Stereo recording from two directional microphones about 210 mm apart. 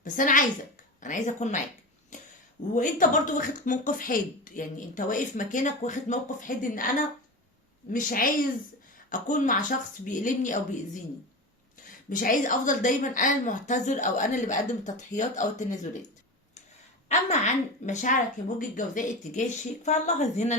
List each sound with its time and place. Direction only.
0.0 s a woman's voice: 40° left (ahead or behind)
2.1 s a sound: 35° left (ahead or behind)
2.7 s a woman's voice: 40° left (ahead or behind)
12.1 s a woman's voice: 40° left (ahead or behind)
17.1 s a woman's voice: 35° left (ahead or behind)